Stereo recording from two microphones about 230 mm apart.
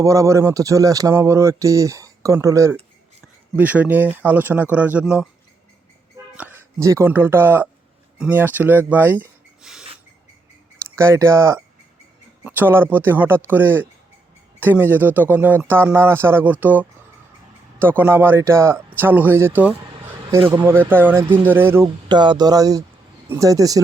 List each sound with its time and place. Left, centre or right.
0.0 s speech: centre
6.3 s speech: centre
10.9 s speech: centre